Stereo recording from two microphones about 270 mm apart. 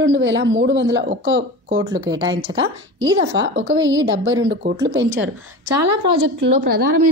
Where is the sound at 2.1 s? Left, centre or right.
Centre.